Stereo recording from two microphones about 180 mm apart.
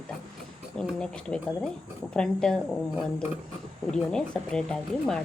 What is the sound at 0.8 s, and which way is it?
Speech, 5° left (ahead or behind).